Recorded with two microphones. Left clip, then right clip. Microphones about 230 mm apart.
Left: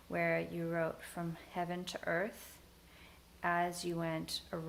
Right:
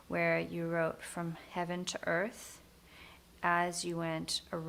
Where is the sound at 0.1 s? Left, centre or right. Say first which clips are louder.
Right 3 dB; right.